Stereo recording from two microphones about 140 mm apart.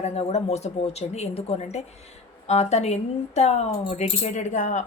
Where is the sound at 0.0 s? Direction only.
50° left (ahead or behind).